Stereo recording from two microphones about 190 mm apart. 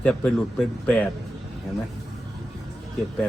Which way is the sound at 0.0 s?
5° left (ahead or behind).